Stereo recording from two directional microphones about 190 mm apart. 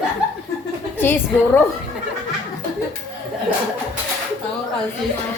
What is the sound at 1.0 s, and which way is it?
Speech, 10° left (ahead or behind).